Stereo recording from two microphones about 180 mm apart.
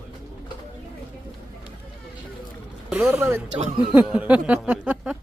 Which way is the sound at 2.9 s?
5° right (ahead or behind).